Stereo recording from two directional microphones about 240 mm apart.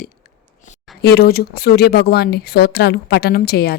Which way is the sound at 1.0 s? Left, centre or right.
Left.